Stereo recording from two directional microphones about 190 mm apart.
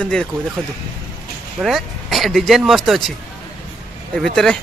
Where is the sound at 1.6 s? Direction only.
Centre (ahead or behind).